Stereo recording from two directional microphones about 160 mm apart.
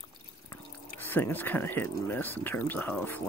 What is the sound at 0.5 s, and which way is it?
Speech, 10° left (ahead or behind).